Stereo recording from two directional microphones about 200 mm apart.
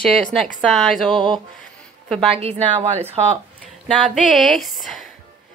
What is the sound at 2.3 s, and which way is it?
Speech, 30° right (ahead or behind).